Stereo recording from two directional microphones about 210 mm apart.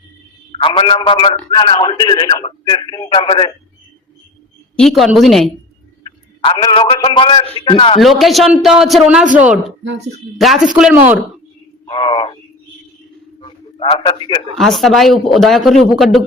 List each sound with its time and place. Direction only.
0.5 s speech: 25° left (ahead or behind)
4.8 s a man's voice: centre (ahead or behind)
6.0 s a man's voice: 20° left (ahead or behind)
7.9 s a man's voice: centre (ahead or behind)
11.9 s speech: 25° left (ahead or behind)
13.4 s a sound: 25° left (ahead or behind)
14.6 s a man's voice: centre (ahead or behind)